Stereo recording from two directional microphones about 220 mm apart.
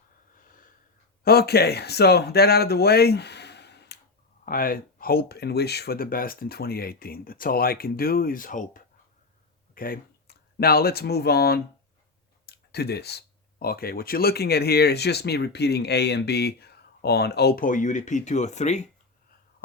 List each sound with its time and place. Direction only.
0.3 s snort: 40° left (ahead or behind)
1.2 s speech: 45° left (ahead or behind)